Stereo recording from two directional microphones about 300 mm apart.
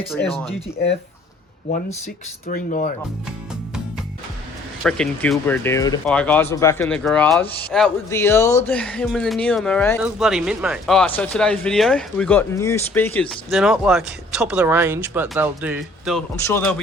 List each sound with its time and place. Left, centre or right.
0.2 s speech: centre
2.5 s speech: left
4.8 s speech: centre
16.3 s speech: centre